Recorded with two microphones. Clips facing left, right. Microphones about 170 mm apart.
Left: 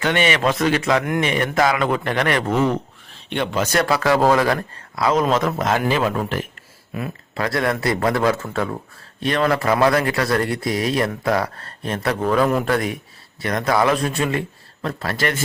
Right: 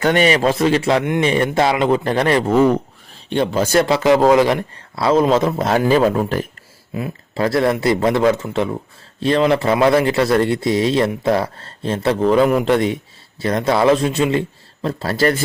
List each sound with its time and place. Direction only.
0.0 s a man's voice: 40° right (ahead or behind)
6.9 s a man's voice: 25° right (ahead or behind)